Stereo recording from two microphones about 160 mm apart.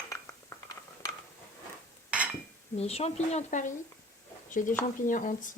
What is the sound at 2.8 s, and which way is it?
A woman's voice, 40° left (ahead or behind).